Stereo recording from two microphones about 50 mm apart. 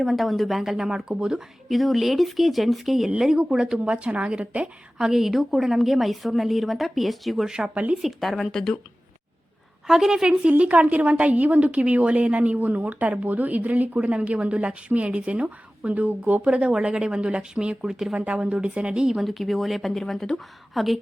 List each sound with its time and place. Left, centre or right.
0.0 s a woman's voice: centre
1.7 s a woman's voice: centre
3.8 s a woman's voice: right; by 7.5 s centre
7.5 s speech: centre
8.0 s speech: centre
9.8 s speech: centre
10.6 s a woman's voice: right
16.6 s a woman's voice: centre
19.2 s a woman's voice: centre
20.7 s a woman's voice: centre